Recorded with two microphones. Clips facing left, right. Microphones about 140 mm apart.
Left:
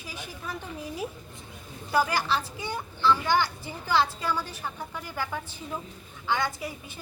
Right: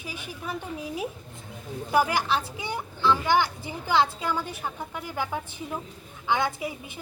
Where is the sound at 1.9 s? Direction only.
15° right (ahead or behind).